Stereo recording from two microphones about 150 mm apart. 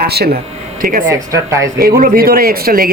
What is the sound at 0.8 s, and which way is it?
Speech, 65° right (ahead or behind).